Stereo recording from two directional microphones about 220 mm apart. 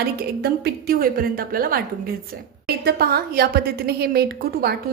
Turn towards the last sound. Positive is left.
turn(degrees=-45)  # may be behind; listen again after turning